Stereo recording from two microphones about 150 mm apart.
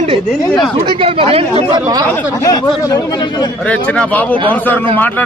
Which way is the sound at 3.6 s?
10° left (ahead or behind).